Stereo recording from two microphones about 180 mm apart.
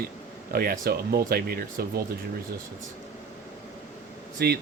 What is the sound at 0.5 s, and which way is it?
Speech, 55° right (ahead or behind).